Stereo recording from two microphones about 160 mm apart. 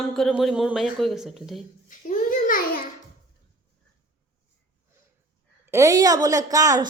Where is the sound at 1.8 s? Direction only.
55° left (ahead or behind).